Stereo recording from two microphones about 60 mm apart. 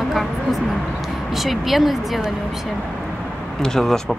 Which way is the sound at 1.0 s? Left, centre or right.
Centre.